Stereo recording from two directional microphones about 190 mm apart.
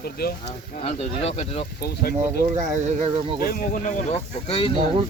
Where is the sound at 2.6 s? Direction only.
40° right (ahead or behind).